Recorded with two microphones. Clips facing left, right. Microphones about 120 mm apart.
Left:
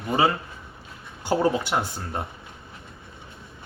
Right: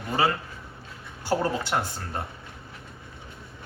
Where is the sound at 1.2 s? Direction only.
15° left (ahead or behind).